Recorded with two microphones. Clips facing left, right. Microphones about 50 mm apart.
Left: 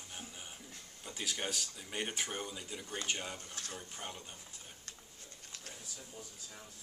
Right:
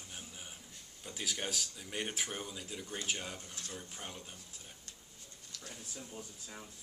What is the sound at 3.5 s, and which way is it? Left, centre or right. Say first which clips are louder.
Speech: left 1 dB; left.